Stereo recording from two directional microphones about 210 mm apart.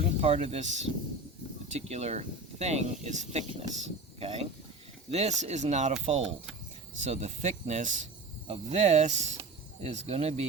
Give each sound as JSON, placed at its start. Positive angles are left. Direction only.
{"t": 0.2, "sound": "speech", "side_deg": -30}